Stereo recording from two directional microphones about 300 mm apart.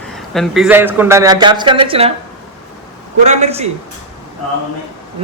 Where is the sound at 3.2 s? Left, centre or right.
Right.